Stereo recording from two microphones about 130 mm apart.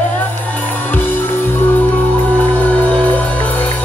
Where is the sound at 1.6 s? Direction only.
15° left (ahead or behind).